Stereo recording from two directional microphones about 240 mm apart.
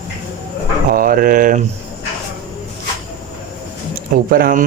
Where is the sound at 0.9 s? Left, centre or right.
Right.